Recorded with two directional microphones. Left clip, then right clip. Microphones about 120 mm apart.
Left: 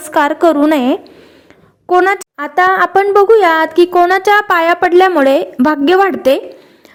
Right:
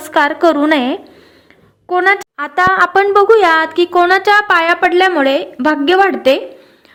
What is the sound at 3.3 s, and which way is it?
A woman's voice, 35° left (ahead or behind).